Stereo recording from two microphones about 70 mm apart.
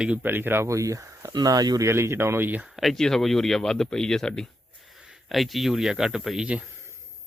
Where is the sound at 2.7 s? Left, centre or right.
Centre.